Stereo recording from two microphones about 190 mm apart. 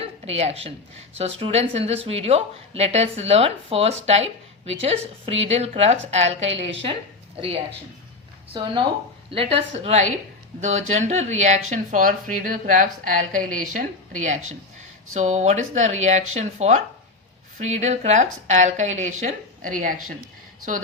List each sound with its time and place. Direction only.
0.0 s a sound: 30° right (ahead or behind)
1.2 s a woman's voice: 35° right (ahead or behind)
8.5 s a woman's voice: 25° right (ahead or behind); by 20.1 s 45° right (ahead or behind)